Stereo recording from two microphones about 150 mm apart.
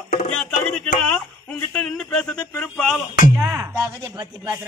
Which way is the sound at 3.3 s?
15° right (ahead or behind).